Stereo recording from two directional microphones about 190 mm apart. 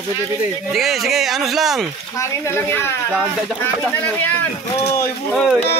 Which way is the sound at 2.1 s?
15° left (ahead or behind).